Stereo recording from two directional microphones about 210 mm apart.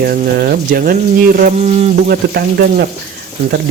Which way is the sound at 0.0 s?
45° right (ahead or behind).